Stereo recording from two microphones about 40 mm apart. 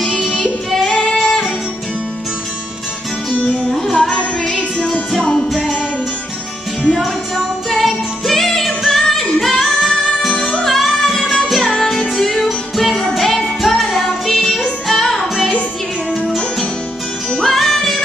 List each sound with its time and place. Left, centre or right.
0.7 s female singing: centre
1.1 s music: centre
3.7 s music: centre
4.1 s music: left
7.0 s music: centre
9.4 s singing: centre
10.6 s music: centre
16.1 s music: centre
17.3 s music: centre